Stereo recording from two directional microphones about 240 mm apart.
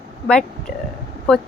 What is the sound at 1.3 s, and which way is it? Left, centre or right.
Speech, centre.